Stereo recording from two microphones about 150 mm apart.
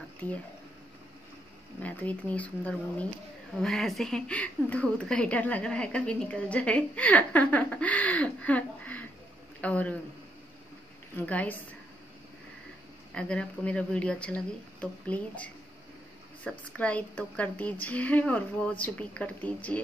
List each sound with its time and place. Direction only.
1.8 s a woman's voice: 10° left (ahead or behind)
11.1 s a woman's voice: 10° left (ahead or behind)
13.1 s a woman's voice: 5° left (ahead or behind)